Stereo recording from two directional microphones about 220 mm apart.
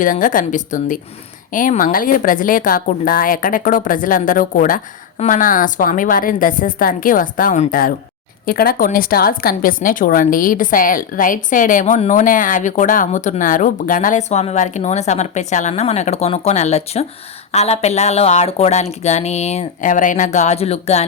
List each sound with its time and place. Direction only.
0.0 s a woman's voice: 35° left (ahead or behind)